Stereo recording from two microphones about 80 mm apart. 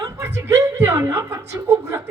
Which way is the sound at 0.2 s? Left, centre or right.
Right.